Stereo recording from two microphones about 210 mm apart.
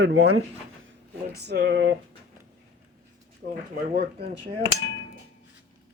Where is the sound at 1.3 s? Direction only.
50° right (ahead or behind).